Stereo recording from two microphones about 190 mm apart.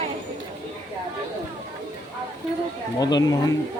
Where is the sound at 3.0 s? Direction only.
20° left (ahead or behind).